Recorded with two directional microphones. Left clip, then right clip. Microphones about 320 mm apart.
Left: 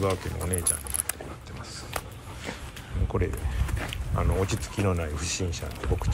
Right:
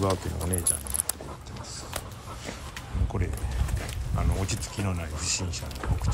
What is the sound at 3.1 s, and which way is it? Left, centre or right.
Speech, centre.